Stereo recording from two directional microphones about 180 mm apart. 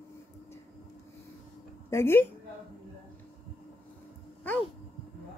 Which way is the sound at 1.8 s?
15° left (ahead or behind).